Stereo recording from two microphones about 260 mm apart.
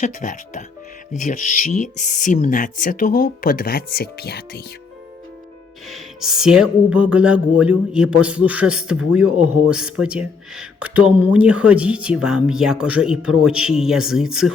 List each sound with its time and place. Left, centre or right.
0.0 s speech: left
5.9 s music: centre